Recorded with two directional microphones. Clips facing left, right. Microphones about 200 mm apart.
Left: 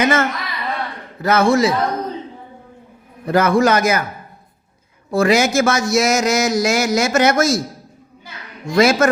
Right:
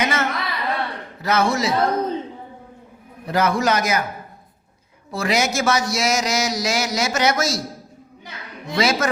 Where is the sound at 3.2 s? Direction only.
50° left (ahead or behind).